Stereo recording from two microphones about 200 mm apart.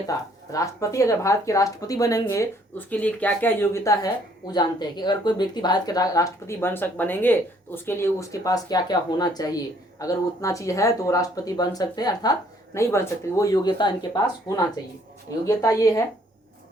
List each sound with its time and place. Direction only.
0.1 s speech: 15° left (ahead or behind)